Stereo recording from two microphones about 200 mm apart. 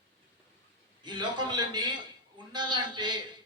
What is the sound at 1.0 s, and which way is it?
A man's voice, 20° right (ahead or behind).